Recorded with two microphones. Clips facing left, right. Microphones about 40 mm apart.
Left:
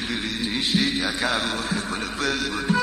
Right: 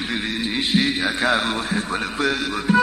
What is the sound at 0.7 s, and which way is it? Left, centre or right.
Music, right.